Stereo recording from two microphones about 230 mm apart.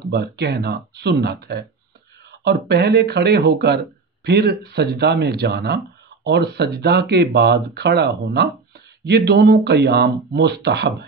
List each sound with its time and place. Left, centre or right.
0.1 s speech: right